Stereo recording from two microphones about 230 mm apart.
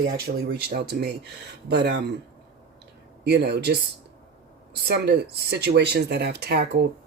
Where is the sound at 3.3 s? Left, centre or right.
Right.